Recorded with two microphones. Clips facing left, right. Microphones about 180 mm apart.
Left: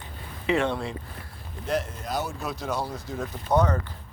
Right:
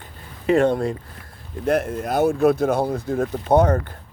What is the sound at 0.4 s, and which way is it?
Speech, 45° right (ahead or behind).